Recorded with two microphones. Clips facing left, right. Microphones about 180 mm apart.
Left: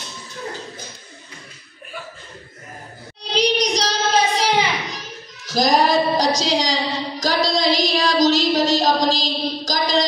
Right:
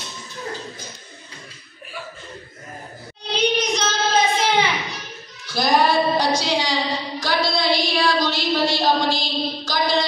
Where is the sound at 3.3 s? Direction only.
35° left (ahead or behind).